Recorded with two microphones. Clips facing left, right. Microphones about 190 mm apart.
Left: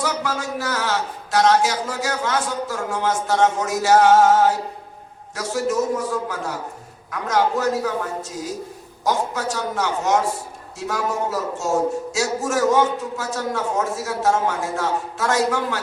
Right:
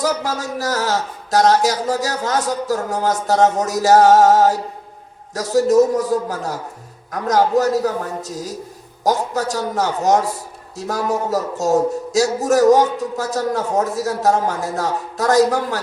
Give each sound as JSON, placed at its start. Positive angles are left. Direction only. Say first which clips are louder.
{"t": 0.0, "sound": "speech", "louder": "right 3 dB", "side_deg": -40}